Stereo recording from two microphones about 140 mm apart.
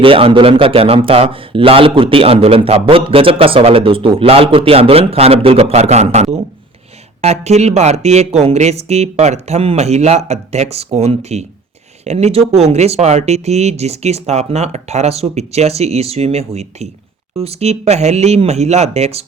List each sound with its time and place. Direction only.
0.0 s a man's voice: 40° right (ahead or behind)